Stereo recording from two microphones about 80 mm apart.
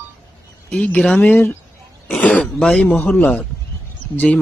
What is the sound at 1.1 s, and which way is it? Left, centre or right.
Speech, left.